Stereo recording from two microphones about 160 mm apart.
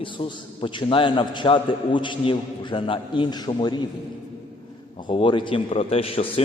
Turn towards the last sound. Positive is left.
turn(degrees=35)  # may be behind; listen again after turning